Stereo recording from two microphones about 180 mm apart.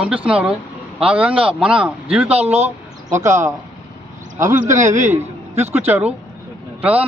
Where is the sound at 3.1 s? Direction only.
15° right (ahead or behind).